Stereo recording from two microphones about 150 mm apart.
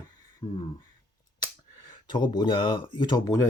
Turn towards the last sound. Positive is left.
turn(degrees=25)  # may be behind; listen again after turning